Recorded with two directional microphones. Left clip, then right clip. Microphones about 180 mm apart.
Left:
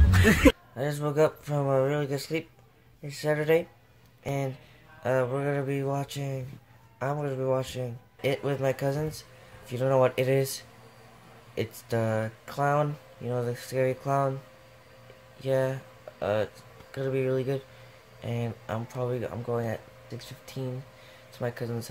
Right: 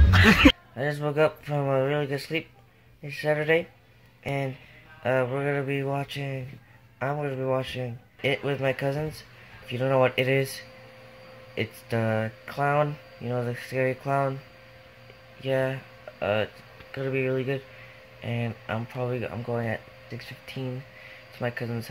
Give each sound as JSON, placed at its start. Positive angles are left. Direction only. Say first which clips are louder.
{"t": 0.7, "sound": "speech", "louder": "right 1 dB", "side_deg": 5}
{"t": 11.5, "sound": "speech", "louder": "right 1 dB", "side_deg": 10}
{"t": 15.4, "sound": "speech", "louder": "right 1 dB", "side_deg": 10}